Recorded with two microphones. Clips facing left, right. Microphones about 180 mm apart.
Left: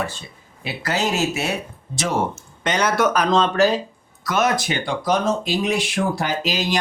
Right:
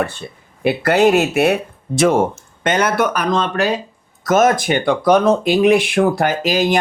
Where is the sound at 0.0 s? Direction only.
60° right (ahead or behind).